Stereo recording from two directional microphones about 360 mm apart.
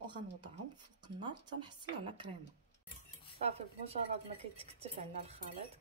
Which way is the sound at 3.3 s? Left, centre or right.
Centre.